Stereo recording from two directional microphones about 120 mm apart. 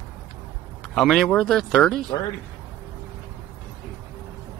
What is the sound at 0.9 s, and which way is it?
Speech, centre (ahead or behind).